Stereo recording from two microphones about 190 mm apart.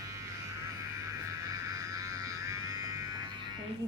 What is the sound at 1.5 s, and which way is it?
Music, 15° right (ahead or behind).